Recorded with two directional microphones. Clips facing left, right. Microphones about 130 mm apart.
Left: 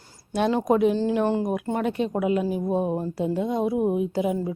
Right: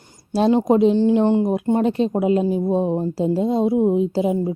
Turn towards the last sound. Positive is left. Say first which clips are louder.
# right 5 dB
turn(degrees=-25)  # may be behind; listen again after turning